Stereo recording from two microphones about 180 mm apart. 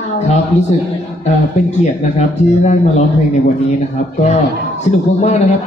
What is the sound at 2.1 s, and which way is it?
Speech, 40° left (ahead or behind).